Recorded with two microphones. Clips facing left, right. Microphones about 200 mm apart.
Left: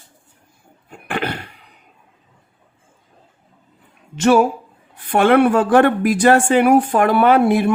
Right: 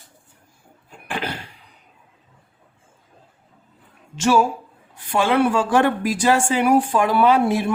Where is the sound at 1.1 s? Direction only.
60° left (ahead or behind).